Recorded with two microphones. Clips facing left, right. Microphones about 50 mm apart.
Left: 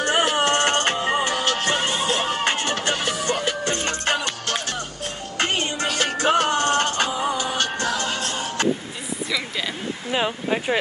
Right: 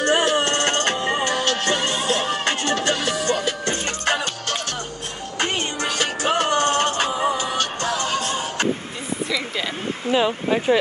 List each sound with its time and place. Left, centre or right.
0.0 s music: centre
5.4 s music: left
6.9 s music: right
10.1 s speech: centre